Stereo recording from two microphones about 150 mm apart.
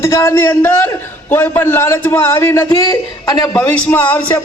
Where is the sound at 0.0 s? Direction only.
20° left (ahead or behind).